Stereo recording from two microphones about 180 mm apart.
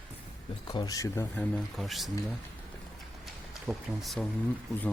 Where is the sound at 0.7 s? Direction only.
20° left (ahead or behind).